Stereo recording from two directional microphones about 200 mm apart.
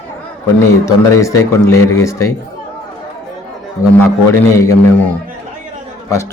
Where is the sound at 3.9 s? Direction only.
10° left (ahead or behind).